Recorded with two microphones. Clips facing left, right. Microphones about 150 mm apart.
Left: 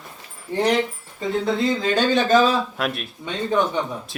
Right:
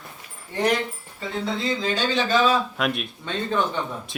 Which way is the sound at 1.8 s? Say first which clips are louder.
Left 5 dB; 55° left (ahead or behind).